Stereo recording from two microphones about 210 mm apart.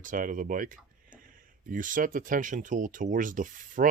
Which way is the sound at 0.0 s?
40° right (ahead or behind).